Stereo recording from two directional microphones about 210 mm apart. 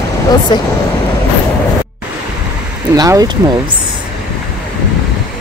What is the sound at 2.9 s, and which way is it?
Speech, 15° right (ahead or behind).